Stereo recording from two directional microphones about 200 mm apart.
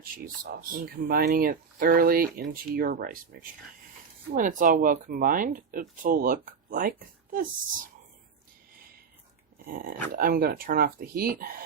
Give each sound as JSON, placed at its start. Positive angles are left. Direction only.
{"t": 0.5, "sound": "speech", "side_deg": -45}
{"t": 4.3, "sound": "speech", "side_deg": -40}
{"t": 9.7, "sound": "speech", "side_deg": -45}